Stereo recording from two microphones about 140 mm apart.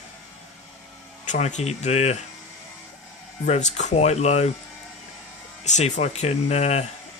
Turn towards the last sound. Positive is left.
turn(degrees=50)  # may be behind; listen again after turning